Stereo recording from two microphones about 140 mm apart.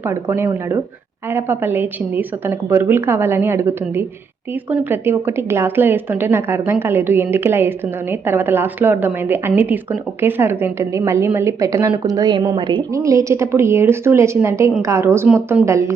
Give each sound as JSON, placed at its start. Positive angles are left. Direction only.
{"t": 0.0, "sound": "a woman's voice", "side_deg": -15}
{"t": 13.0, "sound": "a woman's voice", "side_deg": -20}